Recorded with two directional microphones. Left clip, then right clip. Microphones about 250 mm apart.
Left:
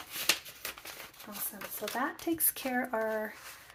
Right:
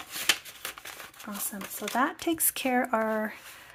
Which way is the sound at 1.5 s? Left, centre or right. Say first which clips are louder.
Right 7 dB; right.